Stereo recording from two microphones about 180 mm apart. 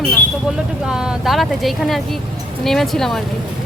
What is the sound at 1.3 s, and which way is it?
Speech, centre (ahead or behind).